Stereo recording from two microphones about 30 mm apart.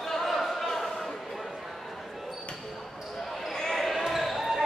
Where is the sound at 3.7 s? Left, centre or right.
Centre.